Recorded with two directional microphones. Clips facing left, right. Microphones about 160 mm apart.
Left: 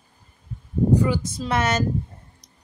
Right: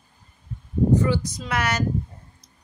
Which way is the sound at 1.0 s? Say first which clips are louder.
Even; 15° left (ahead or behind).